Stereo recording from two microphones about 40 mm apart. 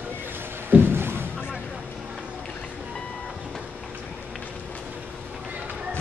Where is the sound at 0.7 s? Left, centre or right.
Right.